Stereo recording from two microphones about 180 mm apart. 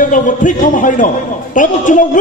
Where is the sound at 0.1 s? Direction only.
45° left (ahead or behind).